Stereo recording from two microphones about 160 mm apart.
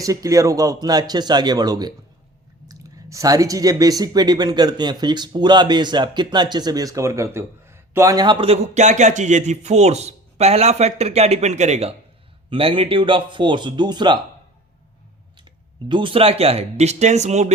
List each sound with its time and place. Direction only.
0.0 s speech: 20° right (ahead or behind)
15.9 s speech: 30° right (ahead or behind)